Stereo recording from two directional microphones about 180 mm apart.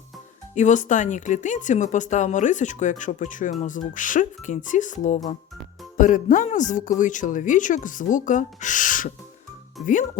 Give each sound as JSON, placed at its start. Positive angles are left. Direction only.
{"t": 0.5, "sound": "speech", "side_deg": 40}